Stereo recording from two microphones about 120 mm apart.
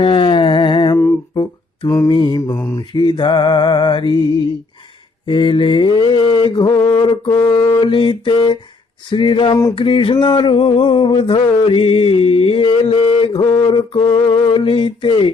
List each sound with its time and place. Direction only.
0.0 s music: 45° left (ahead or behind)
1.4 s a sound: 40° left (ahead or behind)
2.0 s mantra: 40° left (ahead or behind)
2.6 s mantra: 20° left (ahead or behind)
2.9 s mantra: 40° left (ahead or behind)
5.2 s mantra: 45° left (ahead or behind); by 7.8 s 25° left (ahead or behind)
7.8 s a sound: 45° left (ahead or behind)